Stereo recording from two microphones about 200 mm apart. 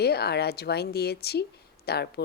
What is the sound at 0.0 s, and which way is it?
A woman's voice, 55° left (ahead or behind).